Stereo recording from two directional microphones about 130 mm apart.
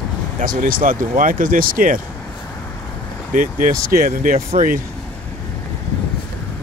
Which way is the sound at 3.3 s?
90° right.